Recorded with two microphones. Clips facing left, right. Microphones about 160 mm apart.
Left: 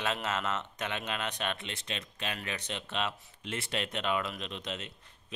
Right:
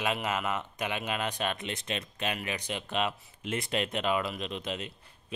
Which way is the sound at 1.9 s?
50° right (ahead or behind).